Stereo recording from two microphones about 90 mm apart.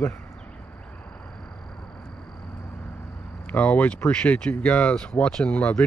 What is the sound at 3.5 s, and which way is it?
Speech, 15° left (ahead or behind).